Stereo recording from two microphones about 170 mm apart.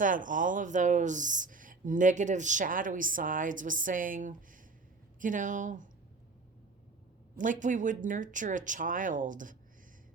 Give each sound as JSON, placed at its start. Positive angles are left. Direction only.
{"t": 0.0, "sound": "speech", "side_deg": -50}
{"t": 7.3, "sound": "speech", "side_deg": -50}